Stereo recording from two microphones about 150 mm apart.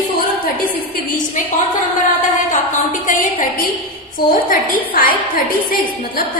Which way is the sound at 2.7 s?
60° left (ahead or behind).